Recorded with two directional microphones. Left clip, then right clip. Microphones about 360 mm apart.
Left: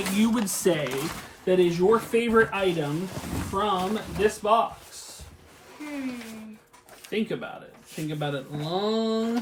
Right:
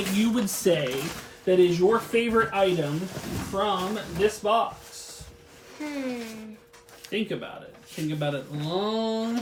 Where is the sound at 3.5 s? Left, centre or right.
Centre.